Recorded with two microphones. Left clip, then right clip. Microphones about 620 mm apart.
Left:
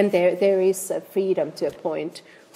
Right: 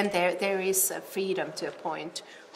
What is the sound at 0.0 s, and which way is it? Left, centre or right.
A woman's voice, left.